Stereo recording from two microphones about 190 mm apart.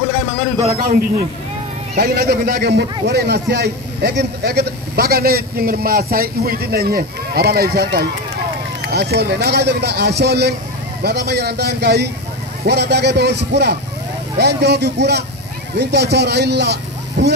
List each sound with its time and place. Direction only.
2.0 s a man's voice: 55° right (ahead or behind)